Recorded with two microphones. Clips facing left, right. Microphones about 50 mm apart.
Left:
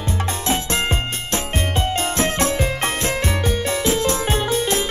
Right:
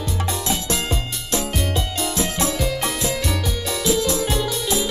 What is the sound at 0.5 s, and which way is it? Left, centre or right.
Music, left.